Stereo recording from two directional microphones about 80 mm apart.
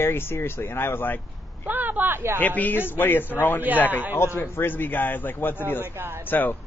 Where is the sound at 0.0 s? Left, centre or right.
Left.